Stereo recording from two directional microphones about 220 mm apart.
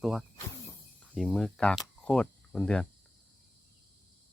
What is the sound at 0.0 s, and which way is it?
Speech, centre (ahead or behind).